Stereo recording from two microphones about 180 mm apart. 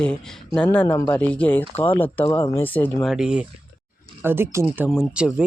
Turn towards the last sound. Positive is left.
turn(degrees=0)  # may be behind; listen again after turning